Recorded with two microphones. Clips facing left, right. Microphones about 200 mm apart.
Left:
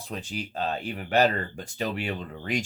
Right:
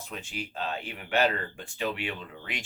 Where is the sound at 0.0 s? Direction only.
35° left (ahead or behind).